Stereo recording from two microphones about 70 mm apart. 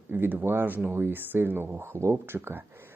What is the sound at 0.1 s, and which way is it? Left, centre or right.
Speech, right.